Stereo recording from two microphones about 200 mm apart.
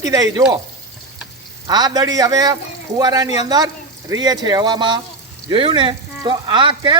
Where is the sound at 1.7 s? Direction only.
20° right (ahead or behind).